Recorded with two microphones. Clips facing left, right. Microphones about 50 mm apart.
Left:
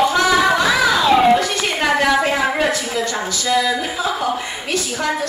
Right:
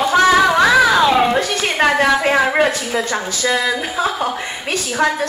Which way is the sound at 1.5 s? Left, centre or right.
Right.